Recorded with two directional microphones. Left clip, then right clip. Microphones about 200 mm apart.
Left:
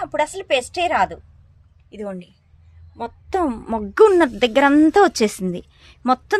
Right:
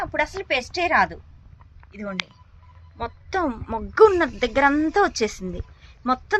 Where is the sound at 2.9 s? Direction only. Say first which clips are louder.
Left 3 dB; 35° left (ahead or behind); by 6.3 s 55° left (ahead or behind).